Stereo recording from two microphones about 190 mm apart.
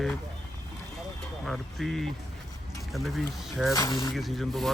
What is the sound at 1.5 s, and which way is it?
Speech, centre (ahead or behind).